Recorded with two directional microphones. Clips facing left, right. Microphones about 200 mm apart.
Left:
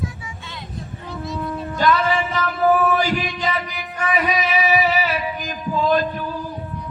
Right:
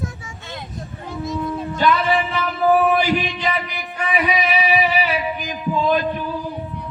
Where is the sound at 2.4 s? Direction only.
10° right (ahead or behind).